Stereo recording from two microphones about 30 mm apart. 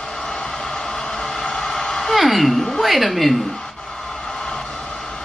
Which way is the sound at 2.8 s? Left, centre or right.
Centre.